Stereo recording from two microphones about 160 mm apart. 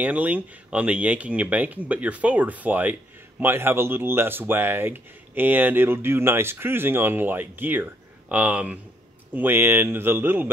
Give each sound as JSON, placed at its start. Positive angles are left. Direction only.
{"t": 0.0, "sound": "speech", "side_deg": -10}